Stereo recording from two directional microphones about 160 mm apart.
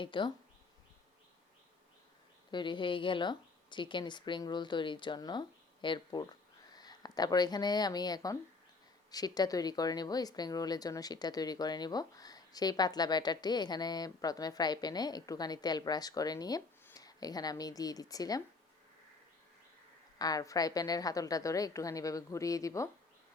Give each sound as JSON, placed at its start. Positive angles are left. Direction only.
{"t": 0.0, "sound": "speech", "side_deg": 30}
{"t": 2.5, "sound": "speech", "side_deg": 30}
{"t": 20.1, "sound": "speech", "side_deg": 25}